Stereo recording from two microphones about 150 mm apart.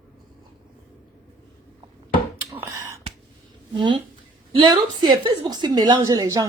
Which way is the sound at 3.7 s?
35° right (ahead or behind).